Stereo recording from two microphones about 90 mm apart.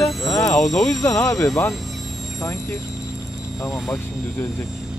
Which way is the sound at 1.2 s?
35° left (ahead or behind).